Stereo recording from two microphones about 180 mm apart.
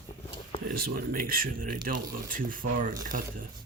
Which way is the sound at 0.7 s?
55° right (ahead or behind).